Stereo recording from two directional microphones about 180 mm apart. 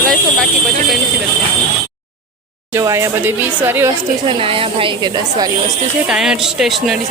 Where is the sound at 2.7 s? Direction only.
15° right (ahead or behind).